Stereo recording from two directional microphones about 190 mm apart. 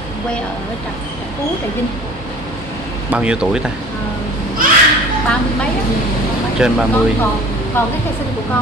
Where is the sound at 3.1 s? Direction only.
5° right (ahead or behind).